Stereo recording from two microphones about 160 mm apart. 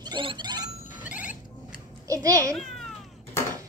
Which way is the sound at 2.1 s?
20° right (ahead or behind).